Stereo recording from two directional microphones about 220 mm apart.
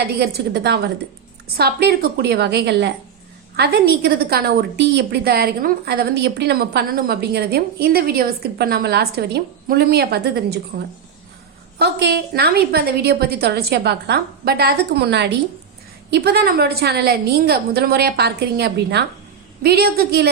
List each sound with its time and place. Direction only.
0.0 s a woman's voice: 45° right (ahead or behind)
11.8 s a woman's voice: 50° right (ahead or behind)